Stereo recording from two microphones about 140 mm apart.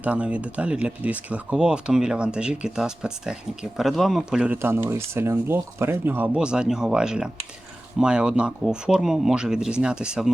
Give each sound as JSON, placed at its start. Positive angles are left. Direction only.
{"t": 0.0, "sound": "speech", "side_deg": -10}
{"t": 4.5, "sound": "speech", "side_deg": -15}